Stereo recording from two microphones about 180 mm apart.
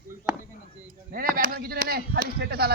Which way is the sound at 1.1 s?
55° right (ahead or behind).